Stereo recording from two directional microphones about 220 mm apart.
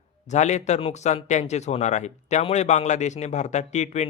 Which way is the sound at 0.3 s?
30° left (ahead or behind).